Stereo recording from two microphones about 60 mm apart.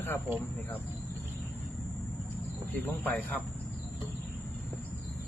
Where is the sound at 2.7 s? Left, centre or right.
Left.